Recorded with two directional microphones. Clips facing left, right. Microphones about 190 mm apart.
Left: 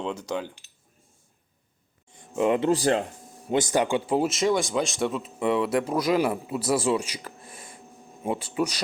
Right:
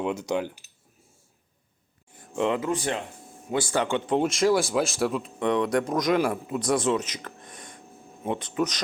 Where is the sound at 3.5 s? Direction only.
20° left (ahead or behind).